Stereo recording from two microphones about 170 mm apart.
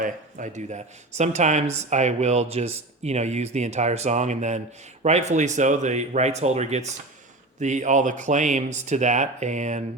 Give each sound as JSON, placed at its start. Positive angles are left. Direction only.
{"t": 0.0, "sound": "speech", "side_deg": -50}